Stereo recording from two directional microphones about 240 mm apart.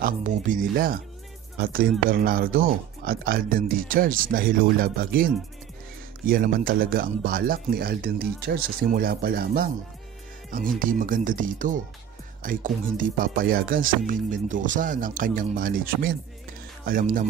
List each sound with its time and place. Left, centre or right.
0.0 s speech: right
10.8 s speech: right